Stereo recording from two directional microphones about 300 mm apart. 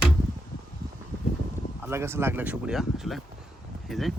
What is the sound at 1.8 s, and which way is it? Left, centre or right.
Speech, centre.